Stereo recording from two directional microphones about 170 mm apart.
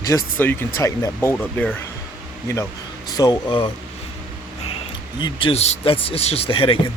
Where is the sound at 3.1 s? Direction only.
25° left (ahead or behind).